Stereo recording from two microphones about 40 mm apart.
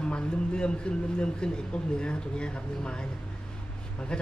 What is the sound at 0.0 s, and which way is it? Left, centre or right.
A man's voice, left.